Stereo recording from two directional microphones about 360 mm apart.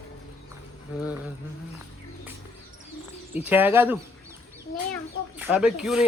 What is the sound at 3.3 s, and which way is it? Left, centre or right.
Speech, centre.